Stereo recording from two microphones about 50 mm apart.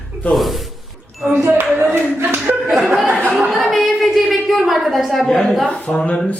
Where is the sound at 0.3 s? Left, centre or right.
Centre.